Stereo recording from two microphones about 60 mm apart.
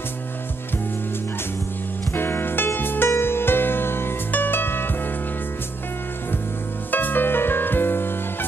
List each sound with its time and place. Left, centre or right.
2.1 s music: left
6.9 s music: left